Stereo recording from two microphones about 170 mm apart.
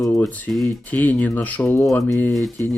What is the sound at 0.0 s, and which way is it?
Speech, 10° left (ahead or behind).